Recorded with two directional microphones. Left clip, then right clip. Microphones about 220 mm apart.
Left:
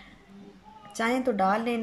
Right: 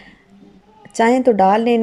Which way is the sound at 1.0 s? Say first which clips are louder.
Right 13 dB; 30° right (ahead or behind).